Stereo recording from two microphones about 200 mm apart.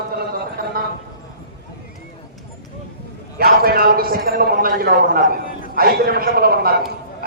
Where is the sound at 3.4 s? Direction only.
50° right (ahead or behind).